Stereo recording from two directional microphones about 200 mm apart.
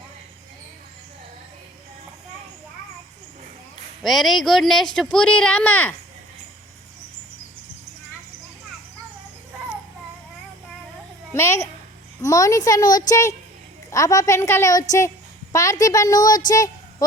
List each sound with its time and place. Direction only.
4.0 s speech: centre (ahead or behind)
11.3 s a woman's voice: 15° left (ahead or behind)